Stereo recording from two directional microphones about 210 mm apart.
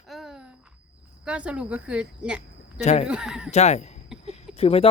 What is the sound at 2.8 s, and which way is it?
Speech, 30° left (ahead or behind).